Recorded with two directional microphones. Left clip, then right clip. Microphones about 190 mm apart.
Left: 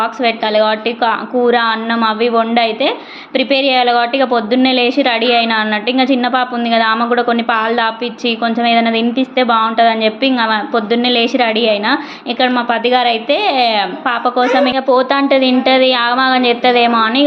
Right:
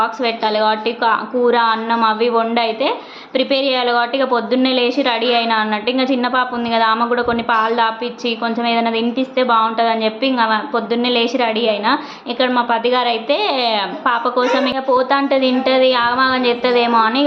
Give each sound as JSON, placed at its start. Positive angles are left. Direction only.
{"t": 0.0, "sound": "a woman's voice", "side_deg": 10}